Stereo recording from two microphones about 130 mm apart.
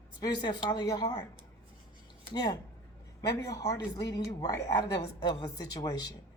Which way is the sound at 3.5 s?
30° left (ahead or behind).